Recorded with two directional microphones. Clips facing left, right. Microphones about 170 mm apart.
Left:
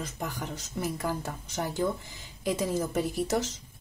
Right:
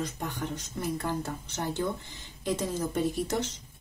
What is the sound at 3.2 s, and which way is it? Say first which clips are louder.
Speech: left 2 dB; 90° left.